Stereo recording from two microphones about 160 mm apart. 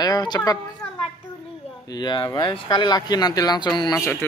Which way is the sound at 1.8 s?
25° left (ahead or behind).